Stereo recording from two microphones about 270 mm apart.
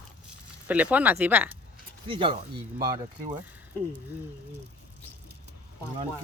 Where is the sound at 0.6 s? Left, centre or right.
Centre.